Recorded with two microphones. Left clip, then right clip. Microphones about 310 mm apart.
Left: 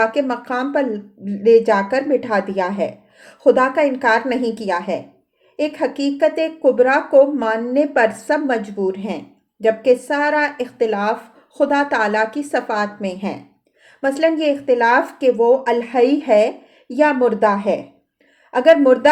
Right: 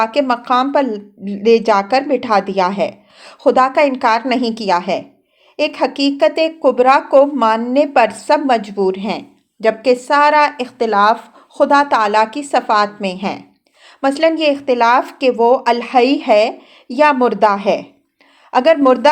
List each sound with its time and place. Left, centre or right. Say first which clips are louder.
0.0 s speech: right 3 dB; right